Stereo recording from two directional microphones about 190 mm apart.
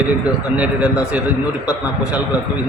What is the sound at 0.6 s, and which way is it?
Speech, 5° right (ahead or behind).